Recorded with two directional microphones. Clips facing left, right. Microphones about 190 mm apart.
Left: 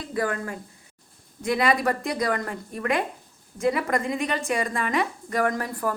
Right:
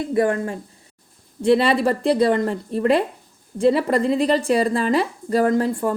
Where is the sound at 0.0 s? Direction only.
25° right (ahead or behind).